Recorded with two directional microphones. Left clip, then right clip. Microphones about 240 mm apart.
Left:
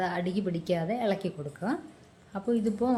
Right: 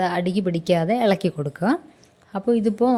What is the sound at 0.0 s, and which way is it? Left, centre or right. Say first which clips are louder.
A woman's voice: right 8 dB; right.